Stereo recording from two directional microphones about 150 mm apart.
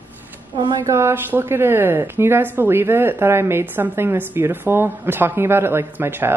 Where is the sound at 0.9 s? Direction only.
20° right (ahead or behind).